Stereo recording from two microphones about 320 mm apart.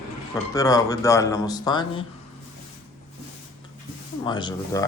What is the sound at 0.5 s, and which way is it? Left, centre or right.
Speech, centre.